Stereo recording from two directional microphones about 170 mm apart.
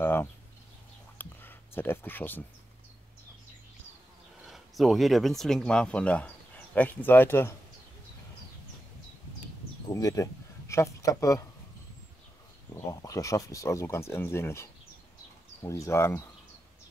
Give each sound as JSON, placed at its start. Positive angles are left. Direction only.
{"t": 0.0, "sound": "a sound", "side_deg": 15}
{"t": 4.5, "sound": "speech", "side_deg": 0}
{"t": 9.8, "sound": "speech", "side_deg": 20}
{"t": 12.7, "sound": "speech", "side_deg": 20}